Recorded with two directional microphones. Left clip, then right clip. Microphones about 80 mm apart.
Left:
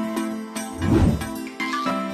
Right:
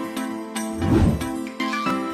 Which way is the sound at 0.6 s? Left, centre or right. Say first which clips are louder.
Even; centre.